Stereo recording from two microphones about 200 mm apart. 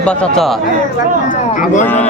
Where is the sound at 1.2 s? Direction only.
40° left (ahead or behind).